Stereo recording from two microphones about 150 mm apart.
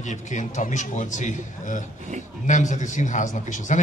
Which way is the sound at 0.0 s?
55° left (ahead or behind).